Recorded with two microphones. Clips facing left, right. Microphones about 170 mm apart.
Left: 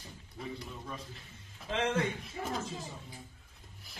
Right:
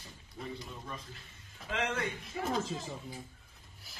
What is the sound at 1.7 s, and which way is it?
Speech, 25° left (ahead or behind).